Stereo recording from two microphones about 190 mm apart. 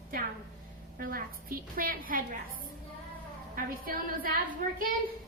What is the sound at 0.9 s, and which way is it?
A woman's voice, 50° right (ahead or behind).